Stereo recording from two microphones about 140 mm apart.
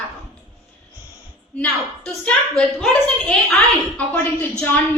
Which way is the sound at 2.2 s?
5° left (ahead or behind).